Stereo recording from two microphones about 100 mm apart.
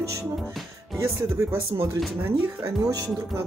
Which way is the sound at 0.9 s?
25° right (ahead or behind).